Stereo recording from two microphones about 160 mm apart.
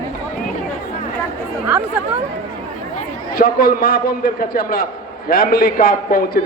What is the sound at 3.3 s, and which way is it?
A man's voice, 65° left (ahead or behind).